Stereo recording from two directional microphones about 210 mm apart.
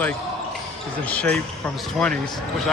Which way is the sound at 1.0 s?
5° left (ahead or behind).